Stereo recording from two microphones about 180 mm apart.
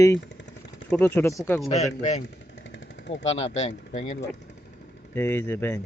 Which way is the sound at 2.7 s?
75° left (ahead or behind).